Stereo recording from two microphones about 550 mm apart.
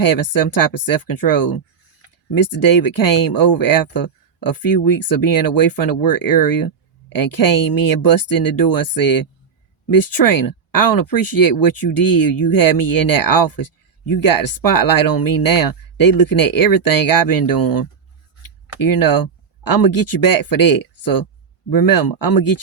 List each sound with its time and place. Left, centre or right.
0.0 s speech: left
10.2 s speech: left